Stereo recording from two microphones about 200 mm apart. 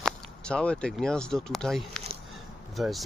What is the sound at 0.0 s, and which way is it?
Speech, 5° left (ahead or behind).